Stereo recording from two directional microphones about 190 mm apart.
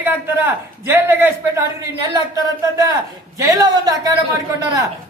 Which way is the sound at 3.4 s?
15° right (ahead or behind).